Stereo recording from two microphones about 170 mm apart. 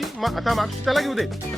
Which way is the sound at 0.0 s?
Centre (ahead or behind).